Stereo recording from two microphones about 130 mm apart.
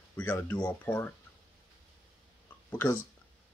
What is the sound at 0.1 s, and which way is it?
Speech, 15° left (ahead or behind).